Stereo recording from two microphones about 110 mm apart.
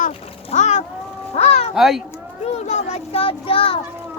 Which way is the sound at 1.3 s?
70° left (ahead or behind).